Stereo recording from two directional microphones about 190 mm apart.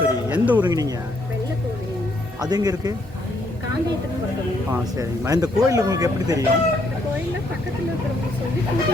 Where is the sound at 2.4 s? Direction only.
20° right (ahead or behind).